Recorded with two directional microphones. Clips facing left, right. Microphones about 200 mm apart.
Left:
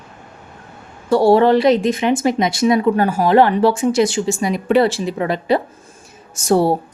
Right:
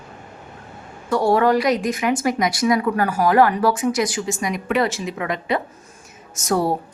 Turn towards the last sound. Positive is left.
turn(degrees=30)  # may be behind; listen again after turning